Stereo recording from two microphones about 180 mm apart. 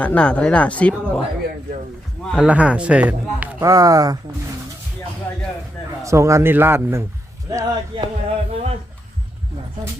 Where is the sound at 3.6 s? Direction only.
20° right (ahead or behind).